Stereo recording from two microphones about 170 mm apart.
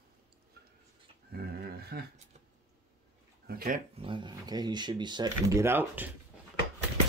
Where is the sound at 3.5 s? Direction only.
65° right (ahead or behind).